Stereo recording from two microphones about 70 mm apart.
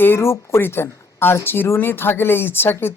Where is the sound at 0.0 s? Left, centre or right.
Left.